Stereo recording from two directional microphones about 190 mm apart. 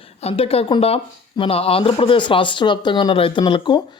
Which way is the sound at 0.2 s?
30° left (ahead or behind).